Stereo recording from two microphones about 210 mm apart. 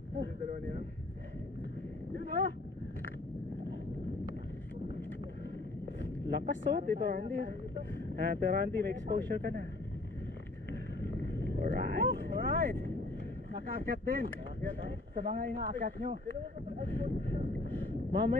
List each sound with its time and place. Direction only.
0.2 s speech: 40° right (ahead or behind)
2.1 s a sound: 45° right (ahead or behind)
6.3 s speech: 50° right (ahead or behind)
11.1 s vehicle: 50° right (ahead or behind)
13.5 s speech: 45° right (ahead or behind)
18.1 s speech: 50° right (ahead or behind)